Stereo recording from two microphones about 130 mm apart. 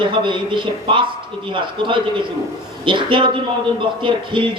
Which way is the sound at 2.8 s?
40° right (ahead or behind).